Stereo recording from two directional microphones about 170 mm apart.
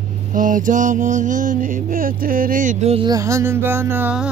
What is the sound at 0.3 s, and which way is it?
Mantra, 50° right (ahead or behind).